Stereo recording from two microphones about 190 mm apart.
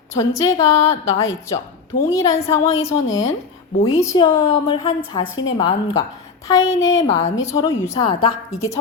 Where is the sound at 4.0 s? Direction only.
20° left (ahead or behind).